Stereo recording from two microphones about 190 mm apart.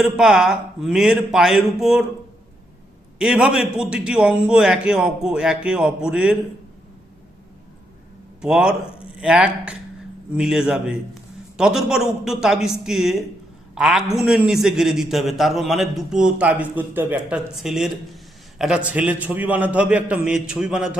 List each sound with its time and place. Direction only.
0.0 s a man's voice: 5° right (ahead or behind)
3.2 s a man's voice: 5° right (ahead or behind)
8.4 s a man's voice: 5° right (ahead or behind)